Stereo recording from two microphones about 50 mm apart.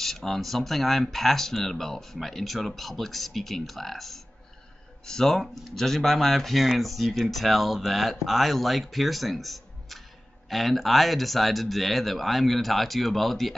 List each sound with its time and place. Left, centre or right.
0.0 s speech: centre